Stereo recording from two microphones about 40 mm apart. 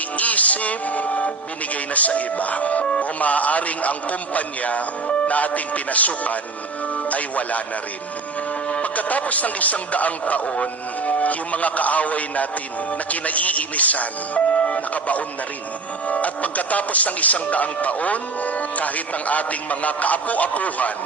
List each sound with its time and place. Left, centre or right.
0.2 s a man's voice: left
8.7 s speech: left
10.4 s speech: left